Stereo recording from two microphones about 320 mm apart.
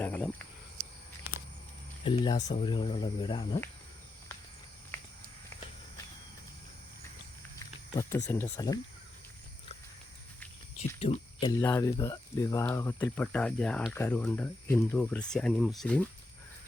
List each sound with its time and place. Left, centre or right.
0.0 s speech: centre
2.0 s speech: centre
4.9 s a sound: centre
7.6 s speech: centre
10.8 s speech: centre